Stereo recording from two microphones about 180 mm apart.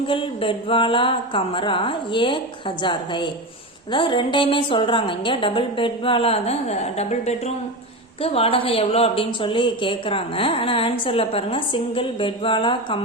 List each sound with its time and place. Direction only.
0.1 s speech: 30° left (ahead or behind)